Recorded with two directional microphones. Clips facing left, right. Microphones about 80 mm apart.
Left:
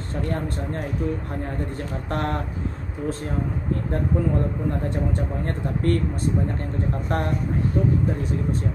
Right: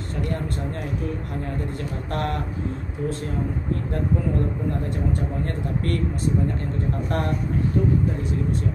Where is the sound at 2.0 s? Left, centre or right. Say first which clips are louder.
Left 1 dB; left.